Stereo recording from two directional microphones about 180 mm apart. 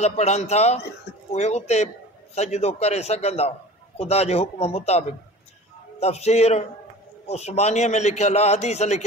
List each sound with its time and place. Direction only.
0.0 s a man's voice: 35° left (ahead or behind)